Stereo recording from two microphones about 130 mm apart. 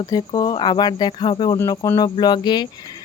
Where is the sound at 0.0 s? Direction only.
30° left (ahead or behind).